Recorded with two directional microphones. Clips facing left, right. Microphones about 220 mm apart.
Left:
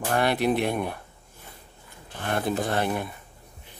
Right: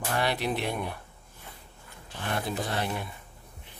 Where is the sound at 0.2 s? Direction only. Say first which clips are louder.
Left 6 dB; 50° left (ahead or behind).